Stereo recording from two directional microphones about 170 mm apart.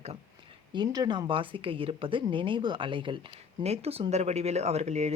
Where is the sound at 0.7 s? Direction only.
25° right (ahead or behind).